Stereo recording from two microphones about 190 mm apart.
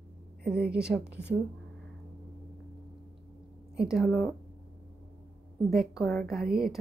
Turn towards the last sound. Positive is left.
turn(degrees=0)  # may be behind; listen again after turning